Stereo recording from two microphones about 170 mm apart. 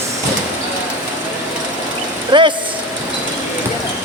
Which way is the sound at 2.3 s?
25° right (ahead or behind).